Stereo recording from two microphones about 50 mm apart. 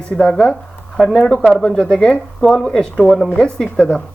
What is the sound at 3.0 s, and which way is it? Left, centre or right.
Speech, centre.